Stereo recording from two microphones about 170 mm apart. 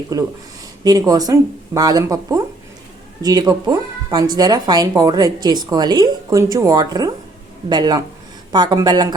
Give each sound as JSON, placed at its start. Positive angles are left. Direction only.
{"t": 0.1, "sound": "a woman's voice", "side_deg": -20}